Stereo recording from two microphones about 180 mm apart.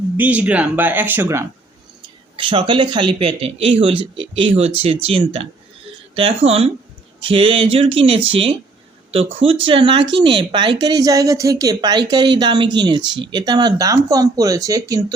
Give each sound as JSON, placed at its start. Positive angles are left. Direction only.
{"t": 0.2, "sound": "speech", "side_deg": -10}
{"t": 2.3, "sound": "speech", "side_deg": -30}